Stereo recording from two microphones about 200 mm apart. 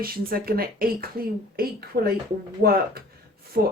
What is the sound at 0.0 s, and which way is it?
A woman's voice, 50° right (ahead or behind).